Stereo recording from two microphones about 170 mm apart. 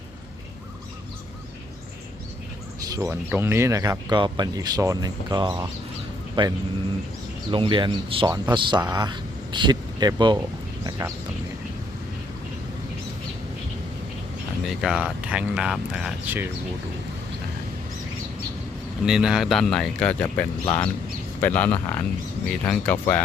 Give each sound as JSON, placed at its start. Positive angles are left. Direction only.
{"t": 2.8, "sound": "speech", "side_deg": -20}
{"t": 14.7, "sound": "speech", "side_deg": -5}
{"t": 19.0, "sound": "speech", "side_deg": -5}